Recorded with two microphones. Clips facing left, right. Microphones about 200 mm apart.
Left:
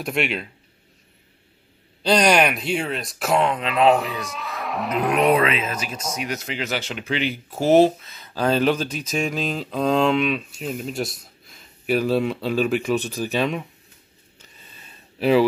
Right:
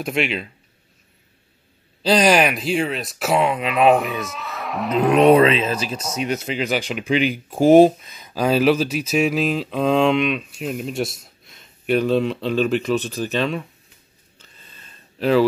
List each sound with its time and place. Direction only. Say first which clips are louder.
0.0 s speech: right 2 dB; centre (ahead or behind)
2.0 s speech: right 2 dB; centre (ahead or behind)
5.1 s speech: right 6 dB; 25° right (ahead or behind); by 13.7 s 10° left (ahead or behind)
14.4 s a sound: even; 10° left (ahead or behind)